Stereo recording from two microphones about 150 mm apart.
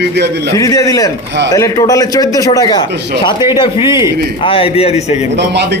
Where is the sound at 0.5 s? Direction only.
20° left (ahead or behind); by 5.1 s 45° left (ahead or behind).